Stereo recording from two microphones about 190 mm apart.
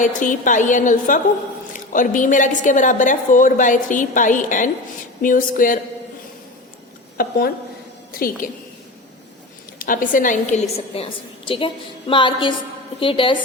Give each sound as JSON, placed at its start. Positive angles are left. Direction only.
{"t": 0.2, "sound": "a woman's voice", "side_deg": 45}
{"t": 7.2, "sound": "a woman's voice", "side_deg": 50}
{"t": 9.7, "sound": "a woman's voice", "side_deg": 45}